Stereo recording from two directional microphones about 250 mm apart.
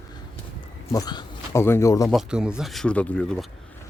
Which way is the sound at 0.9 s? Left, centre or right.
Centre.